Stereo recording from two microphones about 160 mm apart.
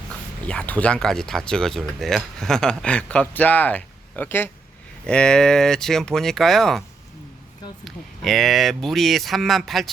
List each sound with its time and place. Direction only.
0.4 s speech: 10° left (ahead or behind)
7.9 s speech: centre (ahead or behind)